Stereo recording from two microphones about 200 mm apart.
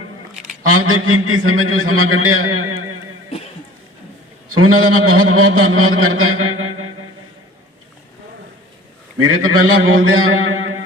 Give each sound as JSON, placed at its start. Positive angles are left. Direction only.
{"t": 0.6, "sound": "a man's voice", "side_deg": -90}
{"t": 4.5, "sound": "a man's voice", "side_deg": -90}
{"t": 6.2, "sound": "music", "side_deg": -90}
{"t": 9.2, "sound": "a man's voice", "side_deg": -85}